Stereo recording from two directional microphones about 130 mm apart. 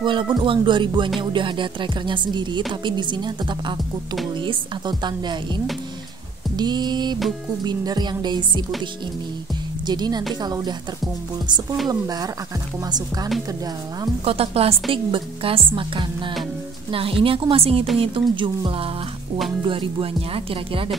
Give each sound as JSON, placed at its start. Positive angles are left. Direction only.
{"t": 0.0, "sound": "speech", "side_deg": -40}
{"t": 6.5, "sound": "speech", "side_deg": -35}
{"t": 9.8, "sound": "speech", "side_deg": -35}
{"t": 11.9, "sound": "speech", "side_deg": -30}
{"t": 14.2, "sound": "a woman's voice", "side_deg": -50}